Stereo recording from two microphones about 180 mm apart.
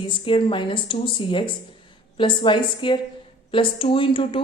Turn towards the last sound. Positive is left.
turn(degrees=30)  # may be behind; listen again after turning